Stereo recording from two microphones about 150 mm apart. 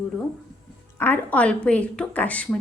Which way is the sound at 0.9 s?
15° left (ahead or behind).